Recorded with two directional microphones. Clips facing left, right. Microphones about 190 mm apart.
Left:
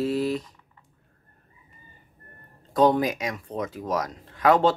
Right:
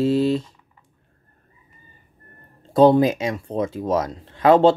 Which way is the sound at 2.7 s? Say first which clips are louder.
Right 6 dB; 30° right (ahead or behind).